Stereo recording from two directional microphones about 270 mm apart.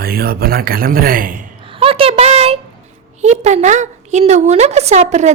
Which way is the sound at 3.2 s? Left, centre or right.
Right.